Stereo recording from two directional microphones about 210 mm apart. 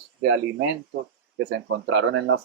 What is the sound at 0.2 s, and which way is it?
Speech, 60° right (ahead or behind).